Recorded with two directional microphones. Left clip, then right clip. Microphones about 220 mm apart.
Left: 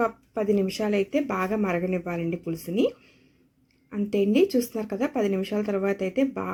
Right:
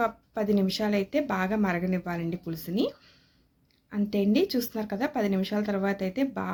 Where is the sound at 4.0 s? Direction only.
5° right (ahead or behind).